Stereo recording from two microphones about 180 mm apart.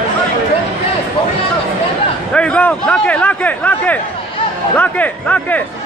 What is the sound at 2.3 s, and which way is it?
A man's voice, 5° left (ahead or behind).